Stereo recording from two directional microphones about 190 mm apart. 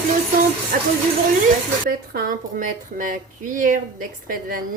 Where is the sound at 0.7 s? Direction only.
50° right (ahead or behind).